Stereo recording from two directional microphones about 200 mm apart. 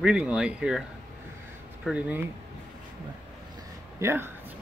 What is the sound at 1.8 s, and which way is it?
Speech, 5° right (ahead or behind).